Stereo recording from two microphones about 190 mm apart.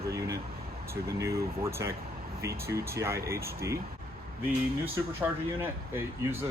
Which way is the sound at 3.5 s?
15° right (ahead or behind).